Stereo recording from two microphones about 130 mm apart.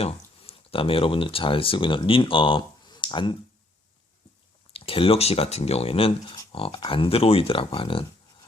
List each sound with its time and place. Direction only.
0.0 s speech: 50° left (ahead or behind)
4.7 s speech: 45° left (ahead or behind)